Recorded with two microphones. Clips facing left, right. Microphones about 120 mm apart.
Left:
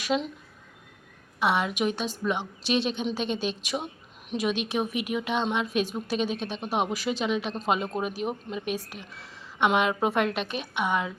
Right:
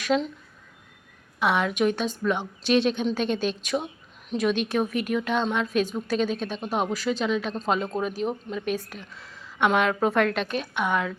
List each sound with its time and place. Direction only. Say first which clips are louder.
0.0 s speech: right 3 dB; 5° left (ahead or behind)
1.4 s speech: right 2 dB; 5° left (ahead or behind)
2.7 s a woman's voice: right 5 dB; 55° right (ahead or behind)
3.0 s speech: right 4 dB; 10° left (ahead or behind)
3.2 s a woman's voice: right 3 dB; 50° right (ahead or behind)
3.6 s speech: right 4 dB; 10° left (ahead or behind)